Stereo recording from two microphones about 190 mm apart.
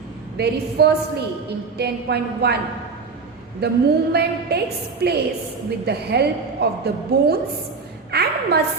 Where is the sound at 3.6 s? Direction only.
60° right (ahead or behind).